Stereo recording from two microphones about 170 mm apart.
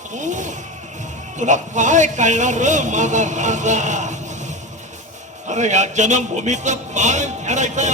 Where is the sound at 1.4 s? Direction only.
45° right (ahead or behind).